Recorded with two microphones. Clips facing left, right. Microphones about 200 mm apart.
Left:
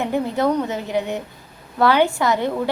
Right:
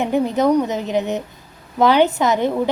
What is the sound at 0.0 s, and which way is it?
A woman's voice, 20° right (ahead or behind).